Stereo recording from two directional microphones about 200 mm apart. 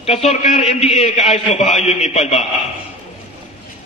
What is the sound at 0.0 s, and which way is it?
A man's voice, 30° left (ahead or behind).